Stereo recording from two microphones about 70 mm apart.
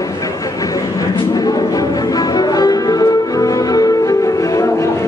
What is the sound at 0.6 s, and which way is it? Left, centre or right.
Music, left.